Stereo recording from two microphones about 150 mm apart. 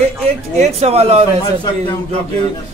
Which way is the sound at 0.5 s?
45° right (ahead or behind).